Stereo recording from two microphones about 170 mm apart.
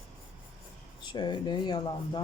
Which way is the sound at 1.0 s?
25° left (ahead or behind).